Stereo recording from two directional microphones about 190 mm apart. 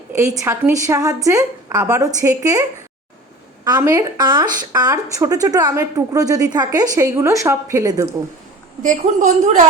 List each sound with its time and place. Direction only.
0.2 s a woman's voice: 15° right (ahead or behind)
8.8 s a woman's voice: 40° right (ahead or behind)